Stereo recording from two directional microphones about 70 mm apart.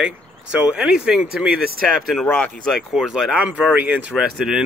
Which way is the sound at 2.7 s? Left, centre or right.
Centre.